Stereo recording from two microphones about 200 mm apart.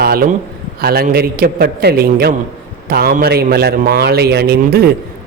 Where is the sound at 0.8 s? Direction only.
50° right (ahead or behind).